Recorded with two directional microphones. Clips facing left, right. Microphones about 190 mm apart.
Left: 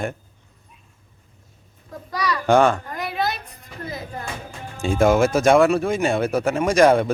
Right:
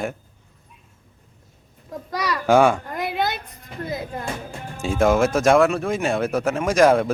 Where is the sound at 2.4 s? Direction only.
10° right (ahead or behind).